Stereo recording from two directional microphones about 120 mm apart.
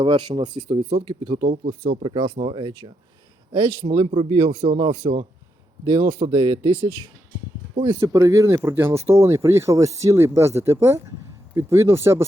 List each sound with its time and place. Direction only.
0.0 s speech: 40° right (ahead or behind)
0.8 s speech: 60° right (ahead or behind)
1.2 s speech: 45° right (ahead or behind)
1.6 s speech: 60° right (ahead or behind)
8.0 s speech: 25° right (ahead or behind)